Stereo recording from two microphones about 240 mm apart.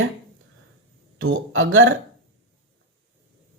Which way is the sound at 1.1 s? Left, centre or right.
Right.